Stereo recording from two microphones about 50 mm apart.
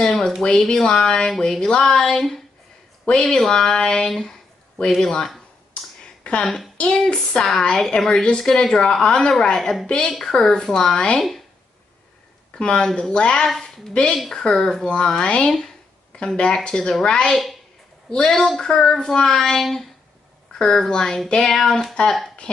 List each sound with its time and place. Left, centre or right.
0.0 s a sound: centre
0.4 s a woman's voice: centre
3.4 s a woman's voice: centre
6.4 s a woman's voice: centre
6.8 s a woman's voice: centre
11.1 s speech: centre
12.5 s a woman's voice: centre
14.5 s a woman's voice: centre
17.3 s a woman's voice: centre
18.1 s a woman's voice: centre